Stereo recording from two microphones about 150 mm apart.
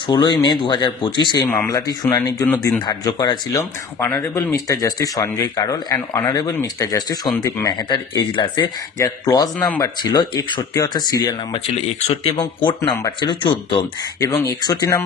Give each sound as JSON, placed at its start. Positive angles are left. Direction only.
{"t": 0.1, "sound": "speech", "side_deg": 30}
{"t": 12.1, "sound": "speech", "side_deg": 40}